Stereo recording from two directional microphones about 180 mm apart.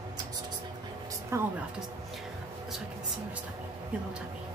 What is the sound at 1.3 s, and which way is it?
Speech, 15° right (ahead or behind).